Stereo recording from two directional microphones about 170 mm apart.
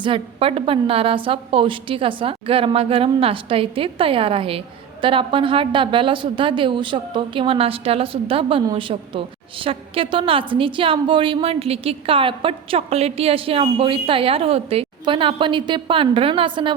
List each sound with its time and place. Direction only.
0.0 s a woman's voice: 30° right (ahead or behind)